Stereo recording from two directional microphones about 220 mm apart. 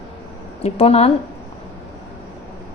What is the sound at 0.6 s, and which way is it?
Speech, 25° left (ahead or behind).